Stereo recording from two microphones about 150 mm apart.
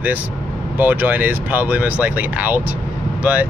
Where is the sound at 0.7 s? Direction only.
10° right (ahead or behind).